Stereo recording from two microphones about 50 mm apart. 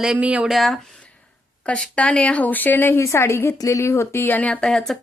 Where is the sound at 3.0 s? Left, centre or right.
Left.